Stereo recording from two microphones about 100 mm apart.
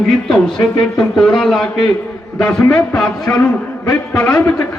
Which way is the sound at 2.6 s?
30° left (ahead or behind).